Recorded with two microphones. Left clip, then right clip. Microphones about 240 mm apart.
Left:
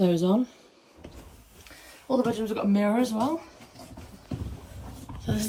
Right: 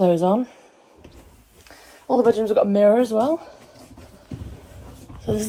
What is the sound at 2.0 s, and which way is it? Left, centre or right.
Speech, right.